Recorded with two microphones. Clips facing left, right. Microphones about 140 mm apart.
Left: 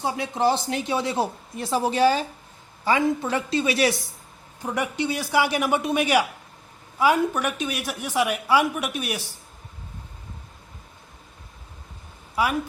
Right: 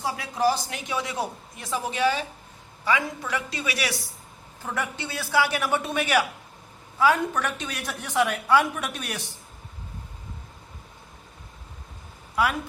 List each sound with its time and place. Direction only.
0.0 s a woman's voice: 25° left (ahead or behind)
4.6 s a woman's voice: 15° left (ahead or behind)